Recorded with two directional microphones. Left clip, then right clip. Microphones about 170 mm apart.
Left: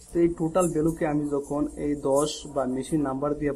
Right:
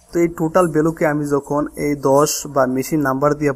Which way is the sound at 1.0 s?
35° right (ahead or behind).